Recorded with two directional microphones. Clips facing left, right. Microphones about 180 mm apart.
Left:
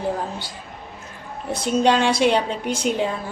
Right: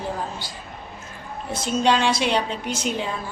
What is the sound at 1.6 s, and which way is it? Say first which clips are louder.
Speech: left 2 dB; 55° left (ahead or behind).